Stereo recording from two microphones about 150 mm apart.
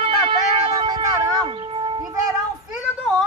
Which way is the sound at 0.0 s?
35° right (ahead or behind).